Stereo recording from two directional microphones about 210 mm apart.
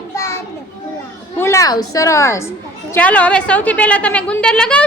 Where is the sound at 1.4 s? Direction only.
15° left (ahead or behind).